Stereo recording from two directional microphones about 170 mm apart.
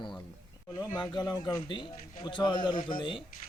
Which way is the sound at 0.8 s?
20° left (ahead or behind).